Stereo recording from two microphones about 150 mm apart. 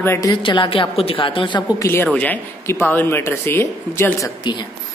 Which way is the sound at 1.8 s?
15° left (ahead or behind).